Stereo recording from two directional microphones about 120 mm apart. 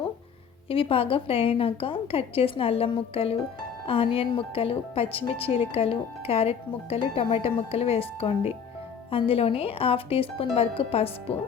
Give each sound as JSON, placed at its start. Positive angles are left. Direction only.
{"t": 0.7, "sound": "speech", "side_deg": 50}